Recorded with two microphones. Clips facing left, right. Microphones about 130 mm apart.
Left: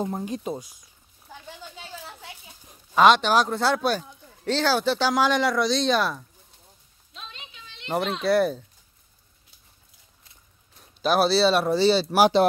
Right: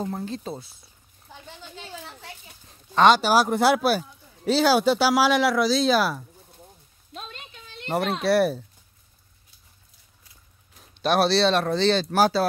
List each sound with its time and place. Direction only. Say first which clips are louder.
0.0 s speech: left 2 dB; 15° left (ahead or behind)
2.6 s a sound: even; 10° left (ahead or behind)
3.2 s speech: right 2 dB; 5° right (ahead or behind)
7.2 s a sound: right 4 dB; 50° right (ahead or behind)
7.9 s a child's voice: right 1 dB; centre (ahead or behind)
10.8 s speech: even; centre (ahead or behind)